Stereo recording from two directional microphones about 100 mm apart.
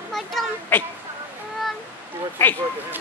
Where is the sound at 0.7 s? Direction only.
20° left (ahead or behind).